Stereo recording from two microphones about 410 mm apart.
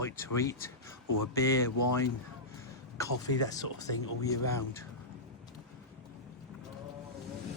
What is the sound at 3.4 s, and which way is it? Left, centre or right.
Speech, centre.